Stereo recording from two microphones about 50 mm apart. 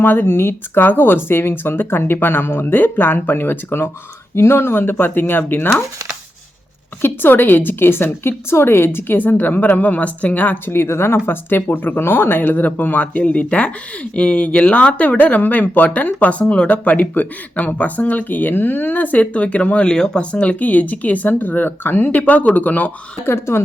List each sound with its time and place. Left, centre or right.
0.0 s speech: left
7.0 s speech: left
10.7 s speech: left
19.9 s speech: centre
20.3 s speech: left
23.2 s speech: left